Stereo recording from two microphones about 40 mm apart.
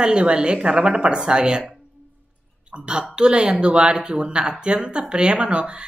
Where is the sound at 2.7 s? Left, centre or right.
Right.